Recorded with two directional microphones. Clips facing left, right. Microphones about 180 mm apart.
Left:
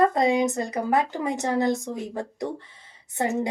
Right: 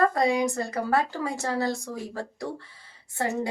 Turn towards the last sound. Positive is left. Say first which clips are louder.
# left 3 dB
turn(degrees=20)  # may be behind; listen again after turning